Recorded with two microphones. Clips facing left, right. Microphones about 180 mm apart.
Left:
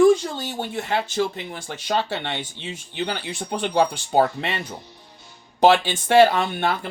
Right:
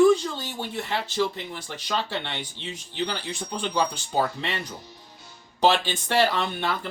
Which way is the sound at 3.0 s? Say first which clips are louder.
Left 2 dB; 55° left (ahead or behind).